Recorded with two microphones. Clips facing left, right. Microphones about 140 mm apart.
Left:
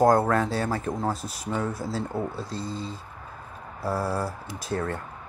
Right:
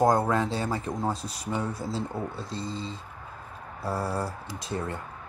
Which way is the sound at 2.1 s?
25° left (ahead or behind).